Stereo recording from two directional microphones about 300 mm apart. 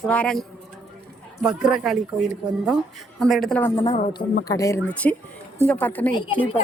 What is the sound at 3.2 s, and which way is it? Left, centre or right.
A woman's voice, centre.